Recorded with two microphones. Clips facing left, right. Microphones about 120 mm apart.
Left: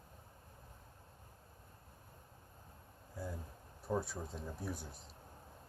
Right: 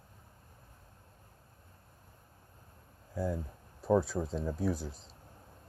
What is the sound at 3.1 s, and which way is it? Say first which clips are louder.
Speech: right 11 dB; 90° right.